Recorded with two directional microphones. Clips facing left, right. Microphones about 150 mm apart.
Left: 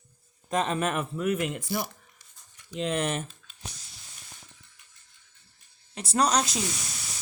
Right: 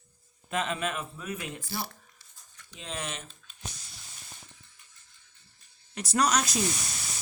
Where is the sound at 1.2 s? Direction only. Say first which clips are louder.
Left 10 dB; 65° left (ahead or behind).